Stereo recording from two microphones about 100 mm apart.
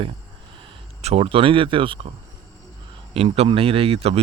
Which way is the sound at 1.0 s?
90° right.